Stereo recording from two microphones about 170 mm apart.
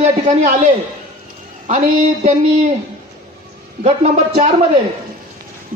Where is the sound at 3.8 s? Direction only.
40° right (ahead or behind).